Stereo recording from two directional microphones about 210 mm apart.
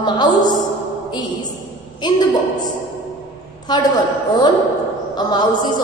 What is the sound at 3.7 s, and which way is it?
A woman's voice, 20° left (ahead or behind).